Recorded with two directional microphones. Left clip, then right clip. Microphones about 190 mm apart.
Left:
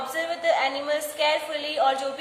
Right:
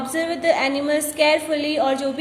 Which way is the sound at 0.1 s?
35° right (ahead or behind).